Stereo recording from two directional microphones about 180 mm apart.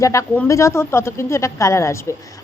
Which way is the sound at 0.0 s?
15° left (ahead or behind).